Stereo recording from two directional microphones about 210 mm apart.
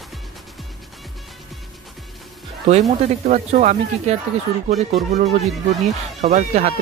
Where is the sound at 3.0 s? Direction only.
35° right (ahead or behind).